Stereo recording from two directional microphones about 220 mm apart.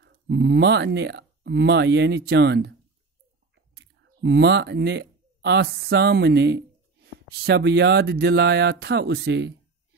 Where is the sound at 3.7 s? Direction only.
50° right (ahead or behind).